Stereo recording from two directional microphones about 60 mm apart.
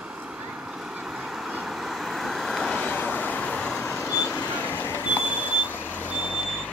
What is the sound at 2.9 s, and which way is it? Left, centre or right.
Vehicle, left.